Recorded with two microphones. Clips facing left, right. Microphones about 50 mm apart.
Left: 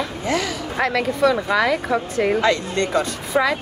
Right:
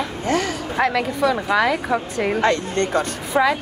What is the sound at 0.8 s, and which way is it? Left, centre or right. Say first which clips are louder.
A woman's voice: left 1 dB; centre.